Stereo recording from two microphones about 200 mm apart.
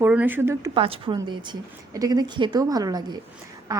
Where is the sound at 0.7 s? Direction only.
25° right (ahead or behind).